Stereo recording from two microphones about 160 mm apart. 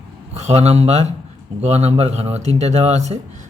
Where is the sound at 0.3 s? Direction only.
40° right (ahead or behind).